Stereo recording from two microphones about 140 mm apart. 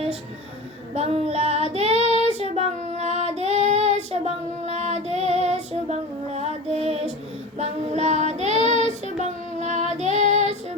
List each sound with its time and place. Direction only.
0.9 s child singing: 50° right (ahead or behind)